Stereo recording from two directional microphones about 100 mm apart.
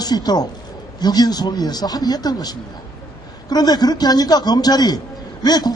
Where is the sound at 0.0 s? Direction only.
40° left (ahead or behind).